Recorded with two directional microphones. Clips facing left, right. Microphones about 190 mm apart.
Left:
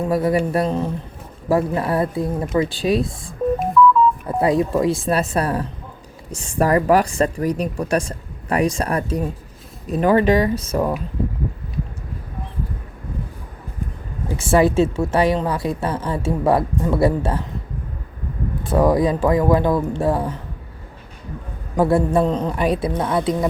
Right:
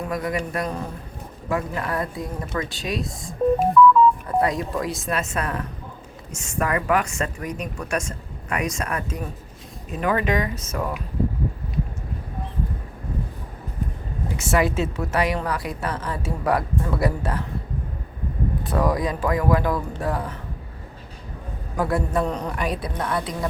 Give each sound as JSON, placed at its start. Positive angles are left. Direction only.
{"t": 0.0, "sound": "a woman's voice", "side_deg": 30}
{"t": 4.4, "sound": "a woman's voice", "side_deg": 30}
{"t": 14.3, "sound": "a woman's voice", "side_deg": 30}
{"t": 18.6, "sound": "a woman's voice", "side_deg": 25}
{"t": 21.8, "sound": "a woman's voice", "side_deg": 30}